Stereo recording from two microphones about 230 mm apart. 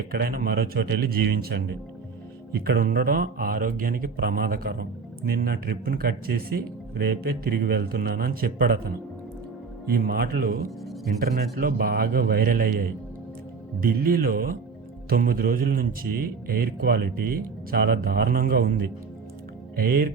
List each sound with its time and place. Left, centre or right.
0.1 s a man's voice: right
9.8 s speech: right